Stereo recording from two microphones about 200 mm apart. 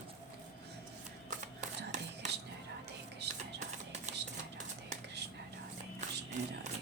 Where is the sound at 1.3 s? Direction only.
40° right (ahead or behind).